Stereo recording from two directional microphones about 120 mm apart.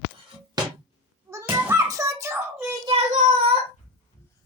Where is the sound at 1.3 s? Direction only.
20° right (ahead or behind).